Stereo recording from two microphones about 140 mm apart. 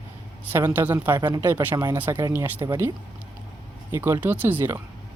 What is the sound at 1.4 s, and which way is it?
Speech, 15° right (ahead or behind).